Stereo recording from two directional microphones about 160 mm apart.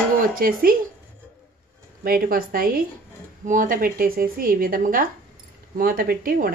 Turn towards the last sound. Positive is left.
turn(degrees=-65)  # may be behind; listen again after turning